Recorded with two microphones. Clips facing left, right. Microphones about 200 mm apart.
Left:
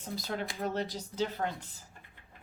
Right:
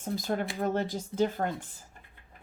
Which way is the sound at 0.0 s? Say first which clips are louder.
Right 6 dB; 50° right (ahead or behind).